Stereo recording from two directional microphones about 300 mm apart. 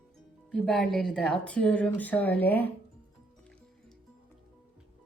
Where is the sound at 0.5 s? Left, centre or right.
Centre.